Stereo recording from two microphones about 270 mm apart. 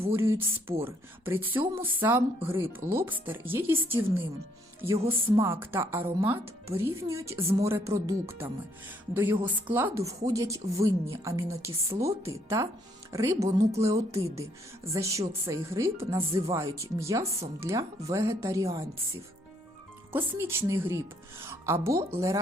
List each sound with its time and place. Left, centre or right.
0.1 s a woman's voice: centre
0.3 s speech: centre
0.9 s a woman's voice: centre
20.1 s a woman's voice: centre